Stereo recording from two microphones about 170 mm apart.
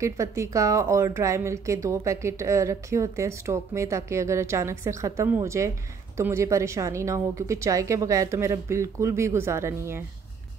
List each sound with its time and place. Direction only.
0.0 s speech: 15° right (ahead or behind)